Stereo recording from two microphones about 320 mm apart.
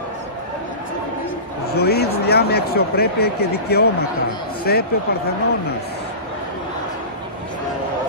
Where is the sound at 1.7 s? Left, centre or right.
Left.